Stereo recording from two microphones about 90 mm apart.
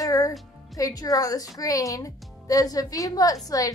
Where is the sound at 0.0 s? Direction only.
40° left (ahead or behind).